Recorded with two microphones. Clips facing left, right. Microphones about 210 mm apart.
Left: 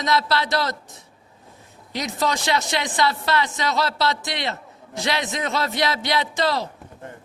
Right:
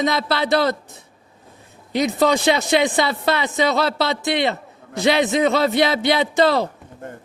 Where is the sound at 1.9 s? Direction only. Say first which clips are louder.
Right 7 dB; 55° right (ahead or behind).